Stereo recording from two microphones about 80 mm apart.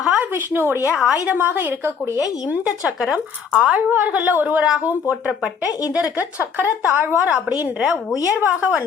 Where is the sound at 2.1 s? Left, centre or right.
Left.